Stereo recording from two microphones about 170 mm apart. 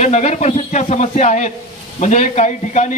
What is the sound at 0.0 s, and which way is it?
Speech, 40° left (ahead or behind).